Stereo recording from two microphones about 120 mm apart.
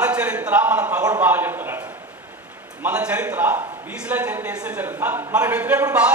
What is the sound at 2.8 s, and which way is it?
A man's voice, 10° right (ahead or behind).